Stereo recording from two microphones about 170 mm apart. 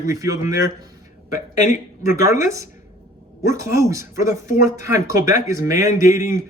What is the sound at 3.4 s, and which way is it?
Speech, 15° right (ahead or behind).